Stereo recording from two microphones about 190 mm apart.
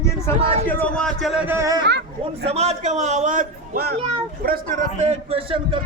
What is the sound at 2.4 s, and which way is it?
A man's voice, 35° right (ahead or behind).